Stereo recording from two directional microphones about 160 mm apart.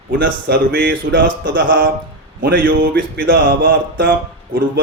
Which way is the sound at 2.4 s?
60° right (ahead or behind).